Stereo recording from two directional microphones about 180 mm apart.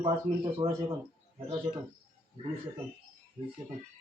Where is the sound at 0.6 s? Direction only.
25° right (ahead or behind).